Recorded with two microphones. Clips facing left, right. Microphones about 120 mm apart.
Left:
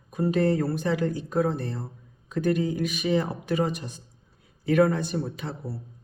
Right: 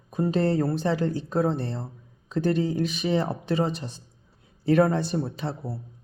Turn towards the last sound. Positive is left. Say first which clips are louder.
# right 3 dB
turn(degrees=-30)  # may be behind; listen again after turning